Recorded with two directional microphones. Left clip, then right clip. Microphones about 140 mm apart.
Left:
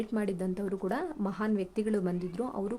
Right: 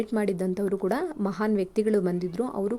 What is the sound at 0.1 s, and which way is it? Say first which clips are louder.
A woman's voice: right 6 dB; 40° right (ahead or behind).